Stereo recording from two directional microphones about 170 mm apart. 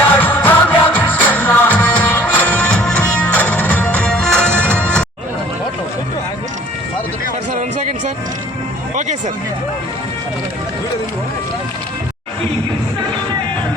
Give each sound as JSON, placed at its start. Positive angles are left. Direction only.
{"t": 0.2, "sound": "music", "side_deg": 10}
{"t": 7.5, "sound": "music", "side_deg": -45}